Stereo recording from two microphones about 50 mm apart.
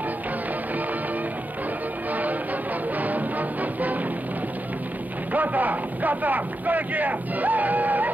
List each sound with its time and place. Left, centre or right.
3.0 s music: right
5.3 s speech: right